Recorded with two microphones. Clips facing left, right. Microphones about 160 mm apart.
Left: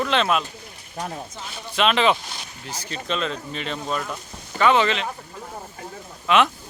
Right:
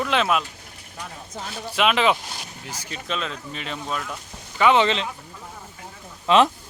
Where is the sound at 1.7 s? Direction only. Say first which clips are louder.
Left 1 dB; 10° right (ahead or behind).